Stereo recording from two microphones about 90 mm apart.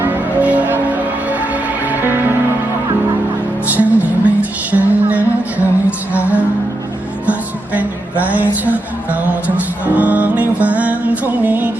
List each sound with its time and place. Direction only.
0.0 s music: 20° right (ahead or behind)
3.7 s music: 20° right (ahead or behind)
9.8 s music: 15° right (ahead or behind)